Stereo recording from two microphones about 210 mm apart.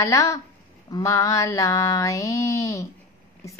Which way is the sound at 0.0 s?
15° left (ahead or behind).